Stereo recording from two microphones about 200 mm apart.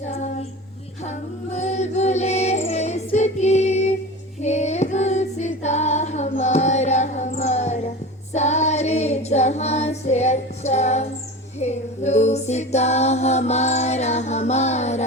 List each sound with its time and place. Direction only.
1.5 s female singing: 35° left (ahead or behind)
3.2 s child singing: 35° left (ahead or behind)
4.4 s female singing: 35° left (ahead or behind)
8.3 s child singing: 35° left (ahead or behind)
11.6 s music: 35° left (ahead or behind)